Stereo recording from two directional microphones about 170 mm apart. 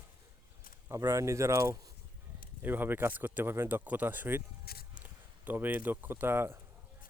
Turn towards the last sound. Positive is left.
turn(degrees=-15)  # may be behind; listen again after turning